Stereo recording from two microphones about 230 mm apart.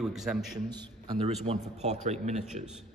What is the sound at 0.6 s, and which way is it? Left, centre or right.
A man's voice, right.